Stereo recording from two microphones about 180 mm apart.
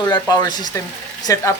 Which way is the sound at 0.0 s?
20° left (ahead or behind).